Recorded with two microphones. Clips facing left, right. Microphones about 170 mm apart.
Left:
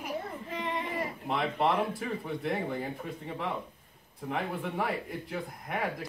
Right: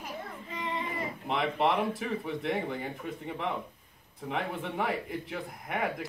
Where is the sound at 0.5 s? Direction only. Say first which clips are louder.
Even; 55° left (ahead or behind).